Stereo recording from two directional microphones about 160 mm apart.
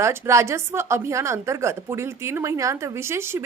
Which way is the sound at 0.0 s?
20° right (ahead or behind).